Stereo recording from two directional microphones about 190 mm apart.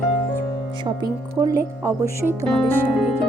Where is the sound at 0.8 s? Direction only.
20° right (ahead or behind).